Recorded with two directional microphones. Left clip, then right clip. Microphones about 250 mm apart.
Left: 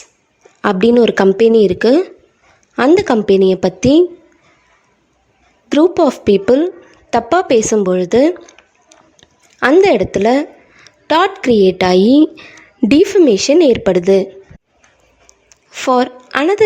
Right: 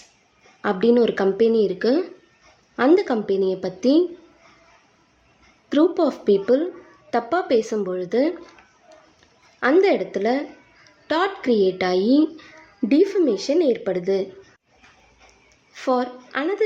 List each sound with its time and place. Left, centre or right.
0.6 s a woman's voice: left
5.6 s a woman's voice: left
15.3 s a sound: left